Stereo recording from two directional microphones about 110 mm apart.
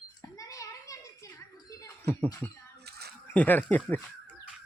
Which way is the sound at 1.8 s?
20° left (ahead or behind).